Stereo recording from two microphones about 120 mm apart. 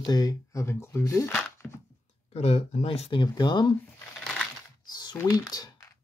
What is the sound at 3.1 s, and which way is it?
Speech, 40° left (ahead or behind).